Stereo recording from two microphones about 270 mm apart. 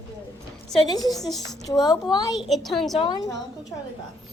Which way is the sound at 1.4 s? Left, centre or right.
Centre.